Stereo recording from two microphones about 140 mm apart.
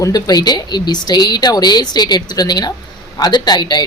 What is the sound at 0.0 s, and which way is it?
Speech, 25° left (ahead or behind).